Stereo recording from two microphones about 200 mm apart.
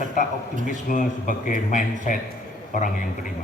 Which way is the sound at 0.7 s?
40° left (ahead or behind).